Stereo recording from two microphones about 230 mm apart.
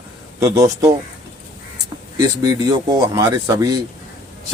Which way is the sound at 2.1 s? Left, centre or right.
Centre.